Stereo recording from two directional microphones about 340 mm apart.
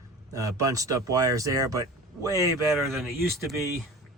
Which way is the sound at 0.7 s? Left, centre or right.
Centre.